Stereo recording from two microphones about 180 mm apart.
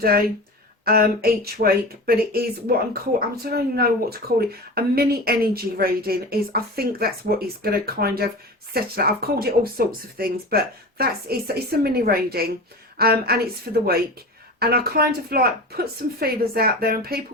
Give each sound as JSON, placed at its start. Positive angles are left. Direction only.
{"t": 0.9, "sound": "speech", "side_deg": -55}
{"t": 14.6, "sound": "speech", "side_deg": -60}